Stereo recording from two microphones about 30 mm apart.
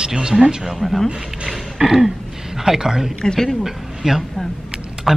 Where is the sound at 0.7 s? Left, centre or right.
Centre.